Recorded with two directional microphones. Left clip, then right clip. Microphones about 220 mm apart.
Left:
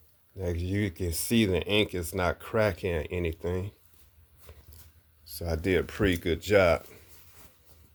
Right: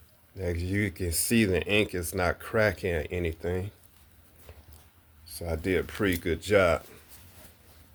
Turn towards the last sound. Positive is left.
turn(degrees=15)  # may be behind; listen again after turning